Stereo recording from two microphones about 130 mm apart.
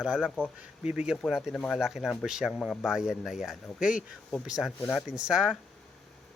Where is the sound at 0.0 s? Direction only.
5° right (ahead or behind).